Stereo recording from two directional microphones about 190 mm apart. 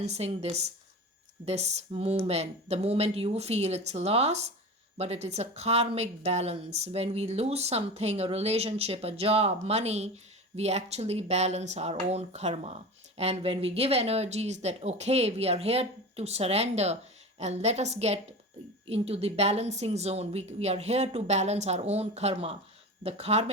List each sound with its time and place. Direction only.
0.0 s speech: 35° right (ahead or behind)